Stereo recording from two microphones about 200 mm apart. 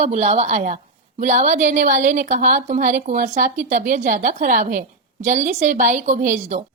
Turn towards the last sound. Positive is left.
turn(degrees=-35)  # may be behind; listen again after turning